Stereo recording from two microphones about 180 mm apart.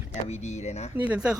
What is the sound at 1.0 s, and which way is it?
Speech, 5° right (ahead or behind).